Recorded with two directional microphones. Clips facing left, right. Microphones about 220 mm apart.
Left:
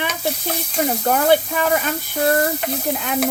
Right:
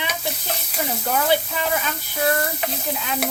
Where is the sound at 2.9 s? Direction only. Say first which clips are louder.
Left 4 dB; 55° left (ahead or behind).